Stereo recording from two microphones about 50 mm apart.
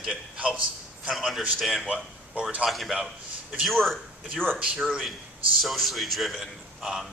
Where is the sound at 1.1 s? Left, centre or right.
Centre.